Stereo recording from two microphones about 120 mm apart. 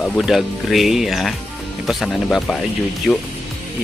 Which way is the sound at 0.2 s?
Centre (ahead or behind).